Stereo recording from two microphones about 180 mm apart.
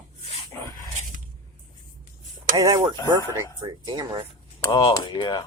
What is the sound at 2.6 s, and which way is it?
Speech, 20° right (ahead or behind).